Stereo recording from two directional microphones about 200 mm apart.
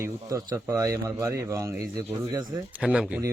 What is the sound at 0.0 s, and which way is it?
Speech, 15° right (ahead or behind).